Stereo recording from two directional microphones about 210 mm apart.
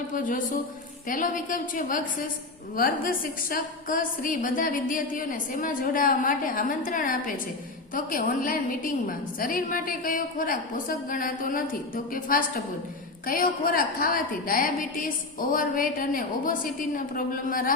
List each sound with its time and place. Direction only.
0.1 s a woman's voice: 40° left (ahead or behind)